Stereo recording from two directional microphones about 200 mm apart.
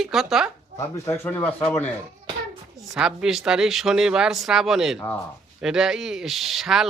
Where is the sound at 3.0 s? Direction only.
5° right (ahead or behind).